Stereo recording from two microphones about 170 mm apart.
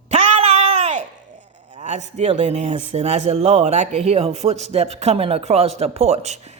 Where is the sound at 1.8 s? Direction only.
40° right (ahead or behind).